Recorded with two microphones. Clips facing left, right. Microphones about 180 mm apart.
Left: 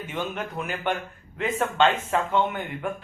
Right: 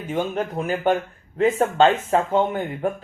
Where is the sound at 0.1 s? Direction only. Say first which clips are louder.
Right 8 dB; 40° right (ahead or behind).